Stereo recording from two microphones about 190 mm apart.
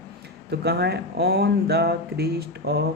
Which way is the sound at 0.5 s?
60° right (ahead or behind).